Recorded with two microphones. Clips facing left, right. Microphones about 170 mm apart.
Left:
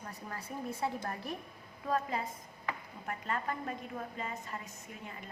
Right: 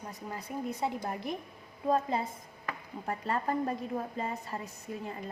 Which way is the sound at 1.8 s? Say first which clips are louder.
Right 5 dB; 30° right (ahead or behind).